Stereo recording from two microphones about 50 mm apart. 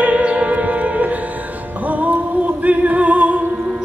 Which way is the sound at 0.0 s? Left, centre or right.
Right.